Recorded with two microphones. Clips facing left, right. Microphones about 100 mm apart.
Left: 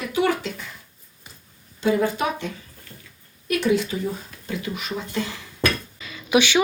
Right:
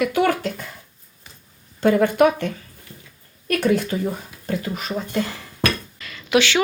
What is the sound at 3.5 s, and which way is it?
Speech, 50° right (ahead or behind).